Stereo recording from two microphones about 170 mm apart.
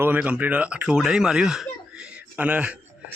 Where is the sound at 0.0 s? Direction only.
10° right (ahead or behind).